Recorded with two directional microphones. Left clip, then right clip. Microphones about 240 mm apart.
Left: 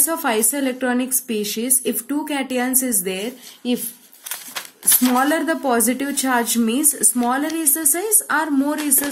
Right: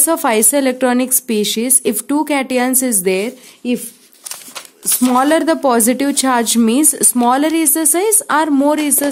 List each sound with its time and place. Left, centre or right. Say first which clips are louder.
0.0 s a woman's voice: right 6 dB; right
5.0 s a woman's voice: right 6 dB; right